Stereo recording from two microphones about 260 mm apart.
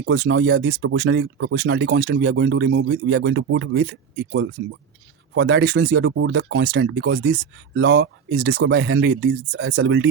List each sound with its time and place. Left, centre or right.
0.0 s speech: right